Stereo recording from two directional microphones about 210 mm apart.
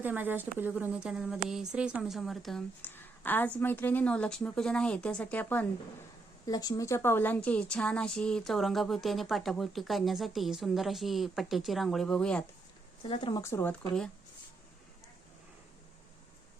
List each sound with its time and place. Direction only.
0.0 s a woman's voice: 10° right (ahead or behind)
13.1 s speech: 25° left (ahead or behind)